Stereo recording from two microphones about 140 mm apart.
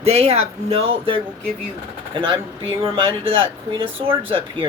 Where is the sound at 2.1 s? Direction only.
35° right (ahead or behind).